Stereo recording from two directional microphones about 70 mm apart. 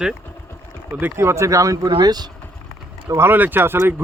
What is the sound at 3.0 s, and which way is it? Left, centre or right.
Speech, right.